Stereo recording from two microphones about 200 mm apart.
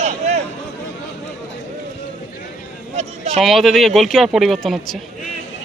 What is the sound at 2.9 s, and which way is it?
Speech, 35° right (ahead or behind).